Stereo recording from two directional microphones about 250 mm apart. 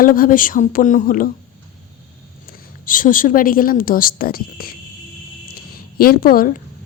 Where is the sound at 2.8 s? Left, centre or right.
Left.